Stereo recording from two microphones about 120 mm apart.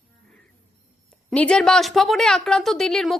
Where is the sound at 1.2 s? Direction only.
10° left (ahead or behind).